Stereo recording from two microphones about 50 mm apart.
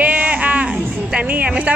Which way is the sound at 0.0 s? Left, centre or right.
Right.